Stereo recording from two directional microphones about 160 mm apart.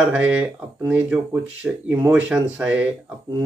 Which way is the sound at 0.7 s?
15° right (ahead or behind).